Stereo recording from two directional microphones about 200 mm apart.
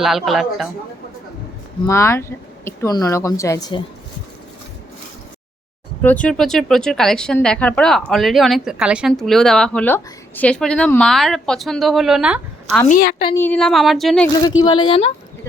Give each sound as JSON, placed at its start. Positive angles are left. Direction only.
{"t": 0.0, "sound": "speech", "side_deg": 0}
{"t": 1.9, "sound": "a woman's voice", "side_deg": 15}
{"t": 6.0, "sound": "speech", "side_deg": 10}
{"t": 12.9, "sound": "a woman's voice", "side_deg": 50}
{"t": 13.3, "sound": "speech", "side_deg": 10}
{"t": 14.6, "sound": "speech", "side_deg": 25}